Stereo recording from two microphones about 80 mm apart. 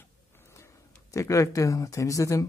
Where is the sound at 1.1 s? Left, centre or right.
Left.